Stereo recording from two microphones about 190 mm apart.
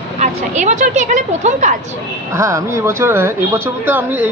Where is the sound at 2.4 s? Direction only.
15° right (ahead or behind).